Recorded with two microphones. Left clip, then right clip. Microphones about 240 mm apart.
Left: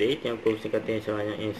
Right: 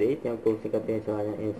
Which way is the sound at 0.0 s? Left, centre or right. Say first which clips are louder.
Even; centre.